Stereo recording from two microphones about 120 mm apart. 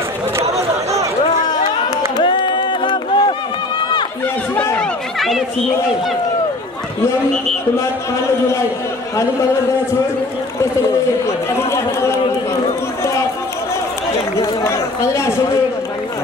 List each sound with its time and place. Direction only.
2.1 s a sound: 40° left (ahead or behind)
4.6 s run: 15° left (ahead or behind)
11.2 s speech: 25° left (ahead or behind)
14.4 s speech: 25° left (ahead or behind)